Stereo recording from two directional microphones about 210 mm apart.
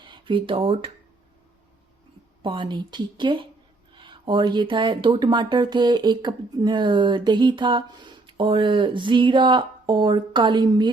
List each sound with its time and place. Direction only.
0.0 s speech: 25° right (ahead or behind)
2.4 s speech: 25° right (ahead or behind)